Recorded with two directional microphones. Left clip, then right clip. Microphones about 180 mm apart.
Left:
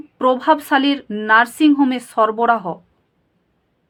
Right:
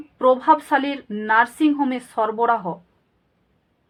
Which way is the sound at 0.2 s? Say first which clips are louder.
Left 1 dB; 35° left (ahead or behind).